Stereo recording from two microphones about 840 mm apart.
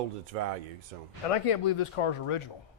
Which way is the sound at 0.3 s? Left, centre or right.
Right.